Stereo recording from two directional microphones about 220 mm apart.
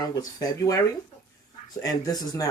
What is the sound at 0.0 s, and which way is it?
Speech, 15° left (ahead or behind).